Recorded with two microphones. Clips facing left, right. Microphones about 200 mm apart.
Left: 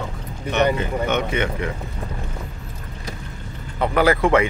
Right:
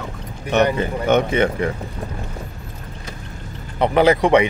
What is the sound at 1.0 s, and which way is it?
Speech, 35° right (ahead or behind).